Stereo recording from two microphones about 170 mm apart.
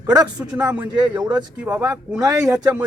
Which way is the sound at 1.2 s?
25° right (ahead or behind).